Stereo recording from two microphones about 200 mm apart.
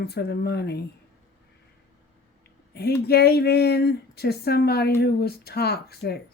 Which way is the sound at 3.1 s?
55° left (ahead or behind).